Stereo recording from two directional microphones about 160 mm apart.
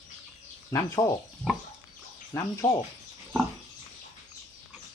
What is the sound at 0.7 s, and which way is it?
Speech, 20° left (ahead or behind).